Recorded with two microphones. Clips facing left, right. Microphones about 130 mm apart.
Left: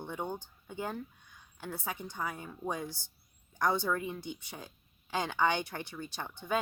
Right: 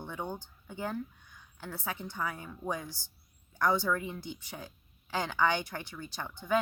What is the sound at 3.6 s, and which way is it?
Speech, 25° left (ahead or behind).